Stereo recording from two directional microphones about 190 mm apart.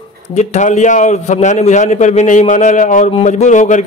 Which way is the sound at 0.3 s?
35° left (ahead or behind).